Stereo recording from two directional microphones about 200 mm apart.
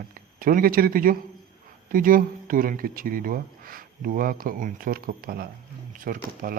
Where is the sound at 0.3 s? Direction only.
45° right (ahead or behind).